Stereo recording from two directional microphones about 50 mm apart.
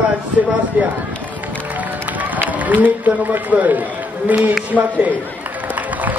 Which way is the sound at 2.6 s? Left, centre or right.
Right.